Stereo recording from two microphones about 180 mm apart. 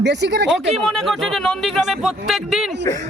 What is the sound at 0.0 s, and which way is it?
Speech, 70° right (ahead or behind).